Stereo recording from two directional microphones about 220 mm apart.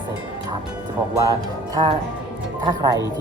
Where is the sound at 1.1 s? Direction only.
15° right (ahead or behind).